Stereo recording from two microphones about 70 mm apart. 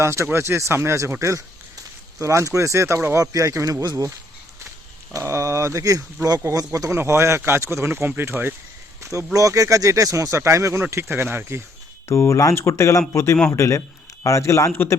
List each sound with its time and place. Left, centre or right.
0.0 s speech: right
3.2 s speech: right
5.1 s speech: right
6.9 s speech: right
9.0 s speech: right
10.9 s speech: right
12.0 s speech: left